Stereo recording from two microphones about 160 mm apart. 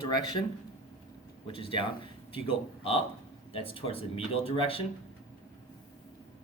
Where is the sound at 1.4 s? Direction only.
35° left (ahead or behind).